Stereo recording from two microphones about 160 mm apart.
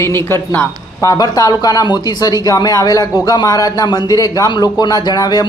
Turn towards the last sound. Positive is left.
turn(degrees=25)  # may be behind; listen again after turning